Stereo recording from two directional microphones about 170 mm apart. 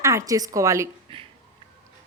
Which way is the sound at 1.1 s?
30° right (ahead or behind).